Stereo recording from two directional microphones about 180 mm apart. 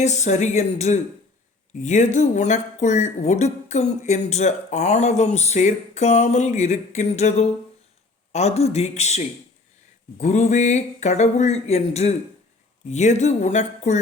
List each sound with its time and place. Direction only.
0.0 s speech: 40° left (ahead or behind)